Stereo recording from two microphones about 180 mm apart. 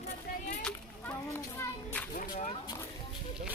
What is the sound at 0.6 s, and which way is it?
Children playing, 10° left (ahead or behind).